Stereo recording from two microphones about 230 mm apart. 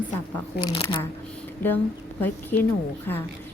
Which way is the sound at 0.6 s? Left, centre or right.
Left.